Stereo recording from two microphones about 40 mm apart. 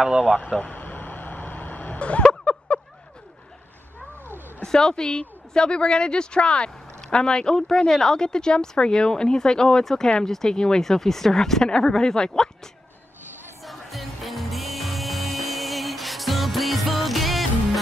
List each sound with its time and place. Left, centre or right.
0.0 s speech: centre
0.5 s speech: left
0.7 s vehicle: left
2.0 s a sound: left
4.6 s speech: centre
13.7 s music: centre